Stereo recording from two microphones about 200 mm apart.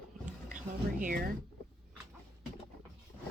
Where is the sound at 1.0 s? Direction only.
45° right (ahead or behind).